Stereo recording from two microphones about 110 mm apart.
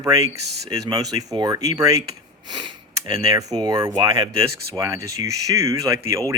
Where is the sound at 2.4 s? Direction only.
40° right (ahead or behind).